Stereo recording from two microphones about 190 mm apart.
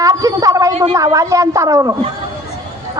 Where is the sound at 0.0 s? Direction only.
15° right (ahead or behind).